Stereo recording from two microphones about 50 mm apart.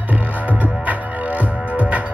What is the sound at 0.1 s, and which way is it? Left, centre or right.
Music, right.